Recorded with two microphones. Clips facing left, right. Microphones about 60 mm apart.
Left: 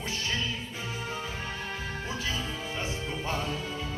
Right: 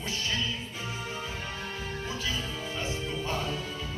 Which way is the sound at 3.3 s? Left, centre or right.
Left.